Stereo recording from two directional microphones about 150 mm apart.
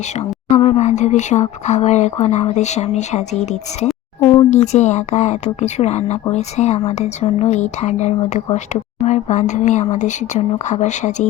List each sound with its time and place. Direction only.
0.2 s speech: 45° left (ahead or behind)